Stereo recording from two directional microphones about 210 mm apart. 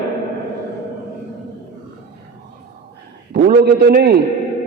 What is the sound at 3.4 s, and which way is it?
Speech, 45° right (ahead or behind).